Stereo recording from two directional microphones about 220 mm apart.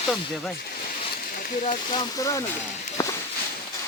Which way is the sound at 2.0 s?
15° left (ahead or behind).